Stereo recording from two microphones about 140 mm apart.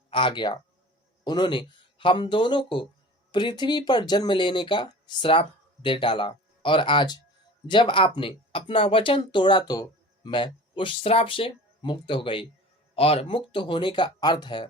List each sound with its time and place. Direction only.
0.1 s speech: 35° left (ahead or behind)